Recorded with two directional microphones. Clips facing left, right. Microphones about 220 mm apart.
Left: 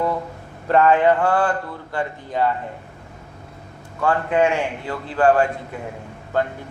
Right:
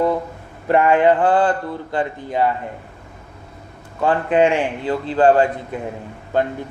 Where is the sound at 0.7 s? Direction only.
15° right (ahead or behind).